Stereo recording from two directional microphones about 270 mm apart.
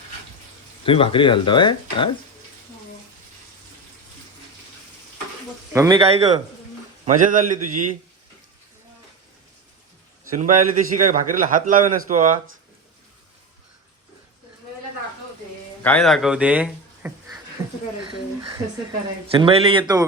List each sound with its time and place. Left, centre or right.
0.9 s speech: centre
5.7 s speech: centre
6.0 s a man's voice: right
10.3 s a man's voice: right
15.8 s speech: centre
19.3 s a man's voice: right